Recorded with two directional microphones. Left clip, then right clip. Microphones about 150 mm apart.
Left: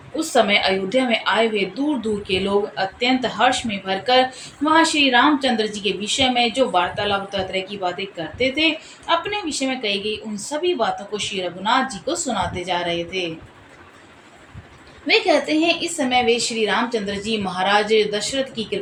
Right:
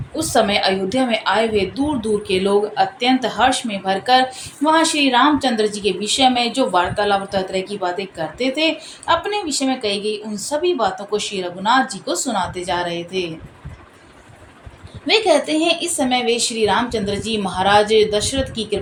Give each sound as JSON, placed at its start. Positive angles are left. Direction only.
{"t": 0.2, "sound": "a woman's voice", "side_deg": -50}
{"t": 15.0, "sound": "a woman's voice", "side_deg": -40}